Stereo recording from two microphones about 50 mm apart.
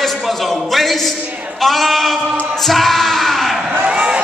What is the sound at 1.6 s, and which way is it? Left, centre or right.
Speech, centre.